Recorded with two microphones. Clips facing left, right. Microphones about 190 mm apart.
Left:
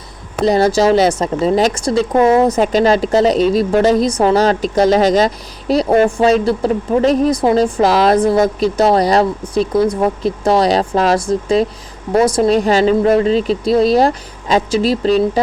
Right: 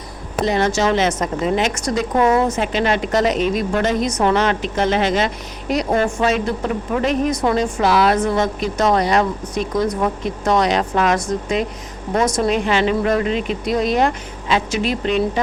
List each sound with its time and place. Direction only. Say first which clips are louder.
0.4 s a woman's voice: left 6 dB; 35° left (ahead or behind)